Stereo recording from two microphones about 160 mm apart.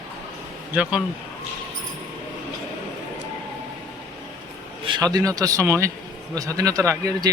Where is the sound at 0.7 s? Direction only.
5° right (ahead or behind).